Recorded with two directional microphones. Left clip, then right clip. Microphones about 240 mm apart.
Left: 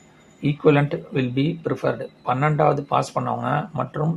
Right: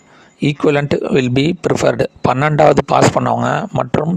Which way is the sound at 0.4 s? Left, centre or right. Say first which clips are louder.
Right 4 dB; right.